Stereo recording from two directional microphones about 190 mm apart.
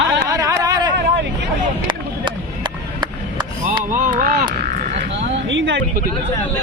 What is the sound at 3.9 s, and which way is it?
Speech, 45° right (ahead or behind).